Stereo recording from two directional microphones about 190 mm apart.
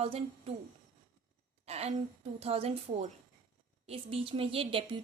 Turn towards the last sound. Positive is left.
turn(degrees=-25)  # may be behind; listen again after turning